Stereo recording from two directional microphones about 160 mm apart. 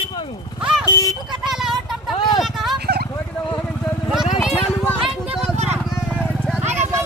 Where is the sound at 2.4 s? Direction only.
Centre (ahead or behind).